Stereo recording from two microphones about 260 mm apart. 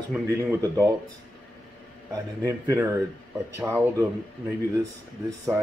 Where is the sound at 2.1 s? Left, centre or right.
Centre.